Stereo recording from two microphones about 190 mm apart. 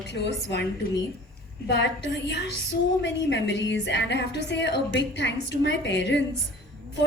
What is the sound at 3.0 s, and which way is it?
A woman's voice, 70° left (ahead or behind).